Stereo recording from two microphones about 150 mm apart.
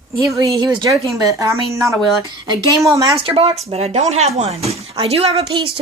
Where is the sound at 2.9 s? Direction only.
20° right (ahead or behind).